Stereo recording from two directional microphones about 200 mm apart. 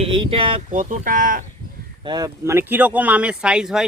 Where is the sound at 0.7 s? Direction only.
40° right (ahead or behind).